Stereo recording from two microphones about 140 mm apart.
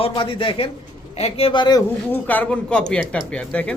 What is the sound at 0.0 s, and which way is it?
A man's voice, 40° left (ahead or behind).